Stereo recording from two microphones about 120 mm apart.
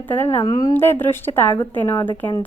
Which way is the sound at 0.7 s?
20° left (ahead or behind).